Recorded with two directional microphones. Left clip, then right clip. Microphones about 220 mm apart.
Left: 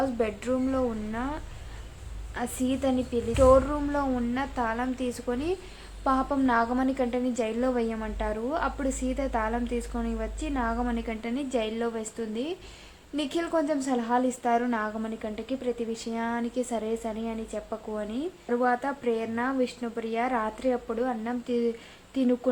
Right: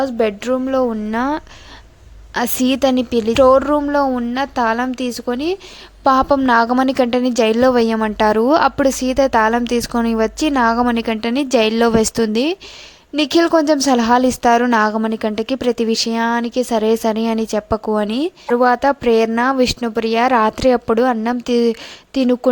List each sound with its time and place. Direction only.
0.0 s a woman's voice: 40° right (ahead or behind)